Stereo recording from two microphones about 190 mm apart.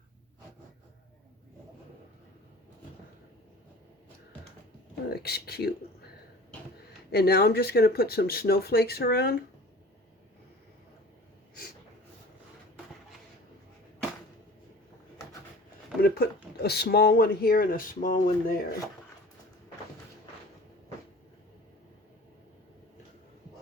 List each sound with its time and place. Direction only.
5.1 s speech: 55° left (ahead or behind)
7.1 s speech: 55° left (ahead or behind)
16.0 s a sound: 50° left (ahead or behind)
16.6 s speech: 60° left (ahead or behind)